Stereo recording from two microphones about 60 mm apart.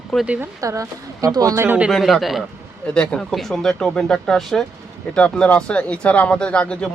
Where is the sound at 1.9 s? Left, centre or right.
Centre.